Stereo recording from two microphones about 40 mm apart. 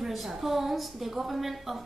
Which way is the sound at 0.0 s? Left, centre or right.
Centre.